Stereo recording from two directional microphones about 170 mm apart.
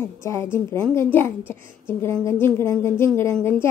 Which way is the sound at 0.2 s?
15° left (ahead or behind).